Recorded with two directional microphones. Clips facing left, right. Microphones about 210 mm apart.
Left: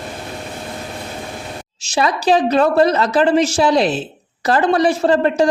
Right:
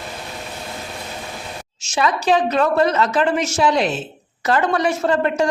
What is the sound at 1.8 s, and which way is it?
A woman's voice, 35° left (ahead or behind).